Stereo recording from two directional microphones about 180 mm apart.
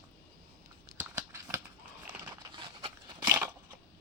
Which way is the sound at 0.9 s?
20° right (ahead or behind).